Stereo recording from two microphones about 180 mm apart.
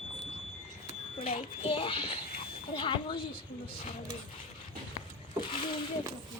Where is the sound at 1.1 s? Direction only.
30° left (ahead or behind).